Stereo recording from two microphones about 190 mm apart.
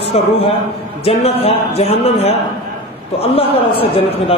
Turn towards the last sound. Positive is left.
turn(degrees=30)  # may be behind; listen again after turning